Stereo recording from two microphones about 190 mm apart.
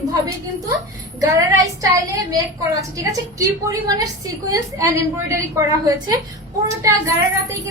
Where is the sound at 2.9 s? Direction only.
15° right (ahead or behind).